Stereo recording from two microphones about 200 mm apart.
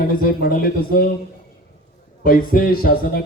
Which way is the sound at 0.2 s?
45° left (ahead or behind).